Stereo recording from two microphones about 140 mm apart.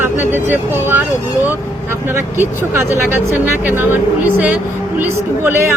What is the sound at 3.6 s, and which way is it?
Speech, 15° right (ahead or behind).